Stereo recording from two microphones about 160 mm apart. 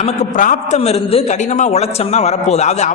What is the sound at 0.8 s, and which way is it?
A man's voice, 40° left (ahead or behind).